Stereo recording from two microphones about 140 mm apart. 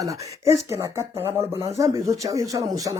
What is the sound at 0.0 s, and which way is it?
Speech, 25° right (ahead or behind).